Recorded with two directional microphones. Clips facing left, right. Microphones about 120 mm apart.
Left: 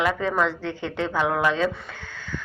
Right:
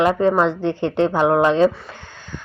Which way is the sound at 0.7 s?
70° right (ahead or behind).